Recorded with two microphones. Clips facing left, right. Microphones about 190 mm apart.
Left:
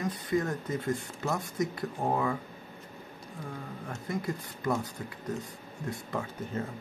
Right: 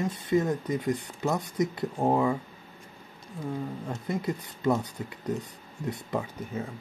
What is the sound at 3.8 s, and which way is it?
Speech, 25° right (ahead or behind).